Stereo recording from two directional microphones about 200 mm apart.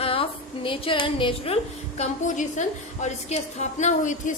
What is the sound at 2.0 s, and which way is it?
A woman's voice, 40° left (ahead or behind).